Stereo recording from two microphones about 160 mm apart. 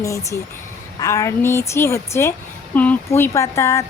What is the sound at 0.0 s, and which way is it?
Speech, 20° left (ahead or behind).